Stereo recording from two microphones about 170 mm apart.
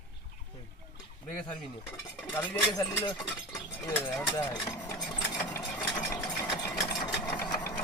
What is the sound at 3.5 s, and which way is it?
Cutlery, 15° left (ahead or behind).